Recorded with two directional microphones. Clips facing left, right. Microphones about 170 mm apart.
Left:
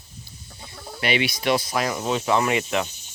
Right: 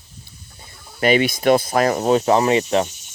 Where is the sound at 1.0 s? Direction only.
45° right (ahead or behind).